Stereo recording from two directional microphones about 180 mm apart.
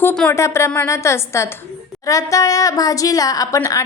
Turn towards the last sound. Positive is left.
turn(degrees=20)  # may be behind; listen again after turning